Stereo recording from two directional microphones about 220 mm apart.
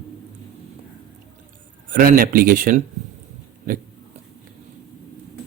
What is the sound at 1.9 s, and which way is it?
Speech, 40° right (ahead or behind).